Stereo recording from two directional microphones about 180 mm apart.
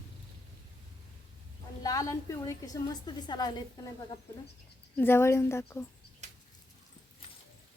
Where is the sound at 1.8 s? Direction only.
20° left (ahead or behind).